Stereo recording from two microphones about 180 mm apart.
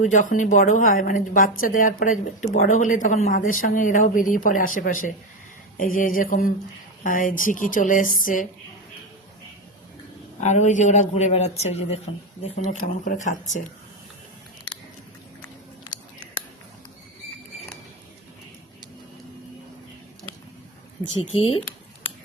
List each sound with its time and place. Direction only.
0.0 s a woman's voice: 45° left (ahead or behind)
10.4 s a man's voice: 40° left (ahead or behind)
15.9 s a sound: 45° left (ahead or behind)
21.3 s a man's voice: 30° left (ahead or behind)